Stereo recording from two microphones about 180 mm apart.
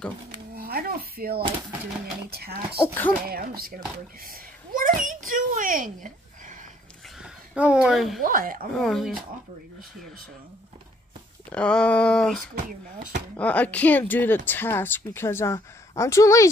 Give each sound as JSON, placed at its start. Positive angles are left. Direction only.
{"t": 0.6, "sound": "a sound", "side_deg": -55}
{"t": 2.3, "sound": "speech", "side_deg": -60}
{"t": 2.8, "sound": "speech", "side_deg": 10}
{"t": 3.3, "sound": "a child's voice", "side_deg": -55}
{"t": 7.2, "sound": "a woman's voice", "side_deg": -5}
{"t": 8.2, "sound": "speech", "side_deg": -50}
{"t": 8.7, "sound": "a sound", "side_deg": 0}
{"t": 11.5, "sound": "a sound", "side_deg": 5}
{"t": 13.4, "sound": "speech", "side_deg": 10}